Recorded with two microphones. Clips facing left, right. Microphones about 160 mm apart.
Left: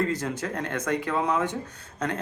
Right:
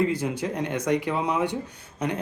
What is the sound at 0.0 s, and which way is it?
A man's voice, 10° right (ahead or behind).